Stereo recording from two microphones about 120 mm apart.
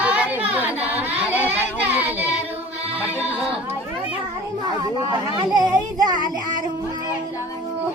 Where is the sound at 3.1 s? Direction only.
15° right (ahead or behind).